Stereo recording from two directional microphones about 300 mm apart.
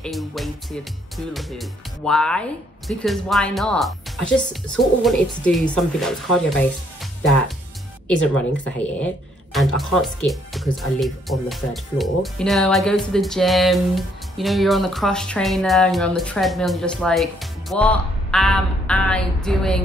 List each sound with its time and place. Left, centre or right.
0.0 s speech: centre
7.0 s music: centre
8.6 s speech: centre